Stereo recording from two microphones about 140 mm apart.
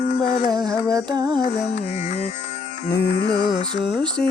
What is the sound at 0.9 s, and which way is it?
Music, 30° right (ahead or behind).